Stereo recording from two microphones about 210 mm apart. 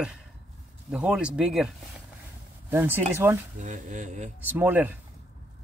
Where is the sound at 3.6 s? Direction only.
35° right (ahead or behind).